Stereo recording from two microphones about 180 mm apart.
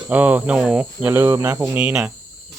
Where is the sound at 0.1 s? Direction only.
10° right (ahead or behind).